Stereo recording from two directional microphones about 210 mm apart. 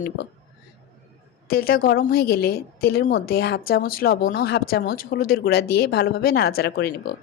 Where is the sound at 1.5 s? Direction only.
45° left (ahead or behind).